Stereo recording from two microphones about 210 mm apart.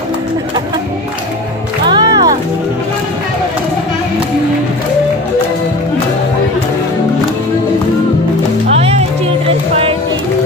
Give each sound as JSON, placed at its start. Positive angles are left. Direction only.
{"t": 1.9, "sound": "music", "side_deg": -20}
{"t": 8.6, "sound": "music", "side_deg": -30}